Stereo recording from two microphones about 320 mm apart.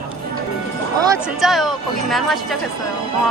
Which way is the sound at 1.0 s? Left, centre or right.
Centre.